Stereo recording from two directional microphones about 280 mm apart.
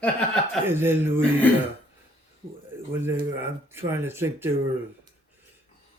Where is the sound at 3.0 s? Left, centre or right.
Centre.